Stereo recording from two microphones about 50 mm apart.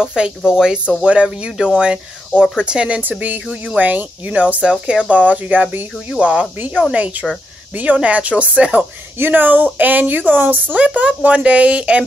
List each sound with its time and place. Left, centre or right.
0.0 s speech: centre
3.0 s speech: right
6.0 s speech: right
9.2 s speech: right